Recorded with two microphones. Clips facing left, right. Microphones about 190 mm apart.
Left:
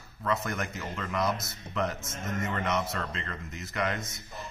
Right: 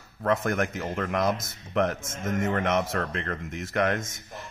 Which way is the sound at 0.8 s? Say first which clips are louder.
Right 5 dB; 55° right (ahead or behind).